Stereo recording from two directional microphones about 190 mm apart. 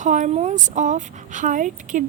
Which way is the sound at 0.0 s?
40° right (ahead or behind).